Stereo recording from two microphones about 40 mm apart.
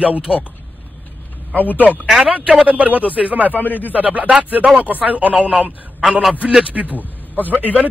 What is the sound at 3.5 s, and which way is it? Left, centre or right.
Speech, left.